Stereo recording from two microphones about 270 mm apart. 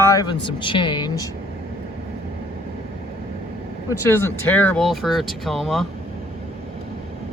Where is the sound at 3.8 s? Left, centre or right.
Centre.